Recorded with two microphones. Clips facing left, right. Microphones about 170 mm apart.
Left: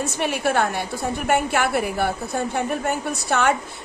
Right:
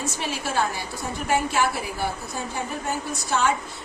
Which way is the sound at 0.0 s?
60° left (ahead or behind).